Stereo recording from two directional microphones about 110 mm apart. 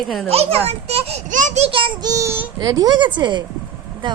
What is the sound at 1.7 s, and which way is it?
Child singing, 50° right (ahead or behind).